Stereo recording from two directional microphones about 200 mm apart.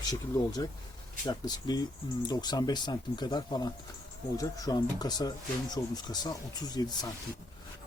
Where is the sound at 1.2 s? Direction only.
20° left (ahead or behind).